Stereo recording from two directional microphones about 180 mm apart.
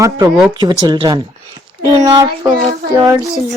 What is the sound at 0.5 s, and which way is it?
Child singing, 25° right (ahead or behind).